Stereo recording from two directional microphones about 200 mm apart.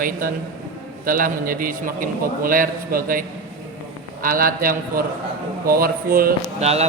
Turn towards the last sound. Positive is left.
turn(degrees=-30)  # may be behind; listen again after turning